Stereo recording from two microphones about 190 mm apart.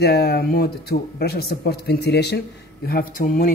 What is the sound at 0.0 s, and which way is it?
Speech, 55° left (ahead or behind).